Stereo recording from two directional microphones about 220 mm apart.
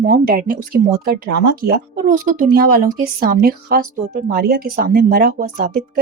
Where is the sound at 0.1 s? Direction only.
45° right (ahead or behind).